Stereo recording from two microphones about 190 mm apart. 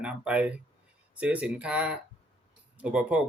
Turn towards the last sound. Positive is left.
turn(degrees=-5)  # may be behind; listen again after turning